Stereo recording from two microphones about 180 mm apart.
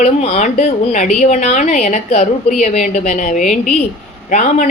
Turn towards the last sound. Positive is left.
turn(degrees=45)  # may be behind; listen again after turning